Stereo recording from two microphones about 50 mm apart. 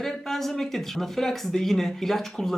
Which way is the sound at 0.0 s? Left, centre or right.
Centre.